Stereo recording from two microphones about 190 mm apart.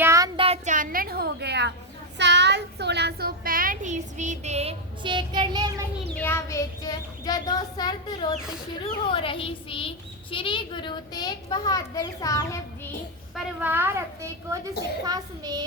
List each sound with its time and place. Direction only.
0.0 s child singing: 15° right (ahead or behind)
0.3 s a sound: 30° right (ahead or behind); by 1.7 s 60° right (ahead or behind)
2.1 s a child's voice: 65° right (ahead or behind); by 5.7 s 20° right (ahead or behind)
6.1 s a child's voice: 10° left (ahead or behind)
13.3 s a child's voice: 10° right (ahead or behind)